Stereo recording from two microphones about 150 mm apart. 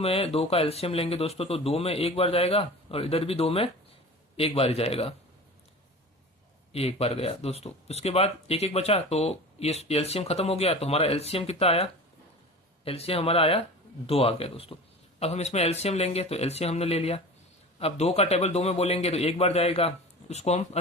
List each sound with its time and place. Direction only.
0.0 s speech: 40° left (ahead or behind)
6.7 s speech: 40° left (ahead or behind)